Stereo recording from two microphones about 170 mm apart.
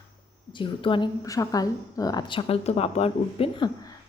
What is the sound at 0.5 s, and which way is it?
A woman's voice, 30° left (ahead or behind).